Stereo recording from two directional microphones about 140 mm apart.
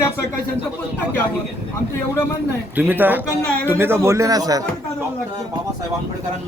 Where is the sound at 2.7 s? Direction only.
15° right (ahead or behind).